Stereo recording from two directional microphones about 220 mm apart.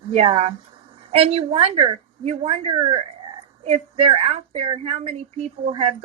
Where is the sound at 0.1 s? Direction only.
30° right (ahead or behind).